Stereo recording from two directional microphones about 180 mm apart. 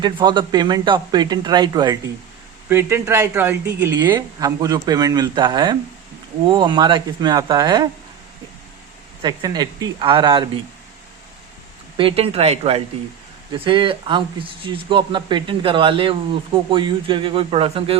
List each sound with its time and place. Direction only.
0.0 s speech: 25° right (ahead or behind)
2.6 s speech: 10° right (ahead or behind)
9.2 s speech: 25° right (ahead or behind)
11.9 s speech: 30° right (ahead or behind)